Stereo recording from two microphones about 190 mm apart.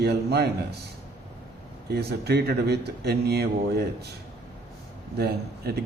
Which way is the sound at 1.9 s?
60° right (ahead or behind).